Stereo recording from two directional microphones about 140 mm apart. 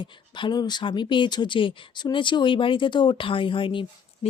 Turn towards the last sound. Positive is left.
turn(degrees=35)  # may be behind; listen again after turning